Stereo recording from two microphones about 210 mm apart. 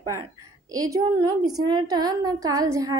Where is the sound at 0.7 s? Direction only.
15° right (ahead or behind).